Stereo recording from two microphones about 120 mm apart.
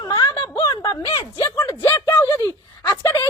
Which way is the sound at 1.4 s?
20° left (ahead or behind).